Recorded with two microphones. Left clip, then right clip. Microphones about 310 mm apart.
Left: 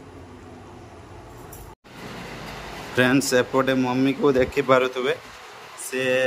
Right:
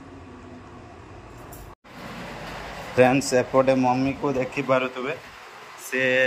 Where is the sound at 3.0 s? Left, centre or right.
Centre.